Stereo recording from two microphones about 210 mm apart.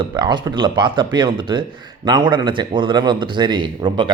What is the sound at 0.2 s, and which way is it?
A man's voice, 20° right (ahead or behind).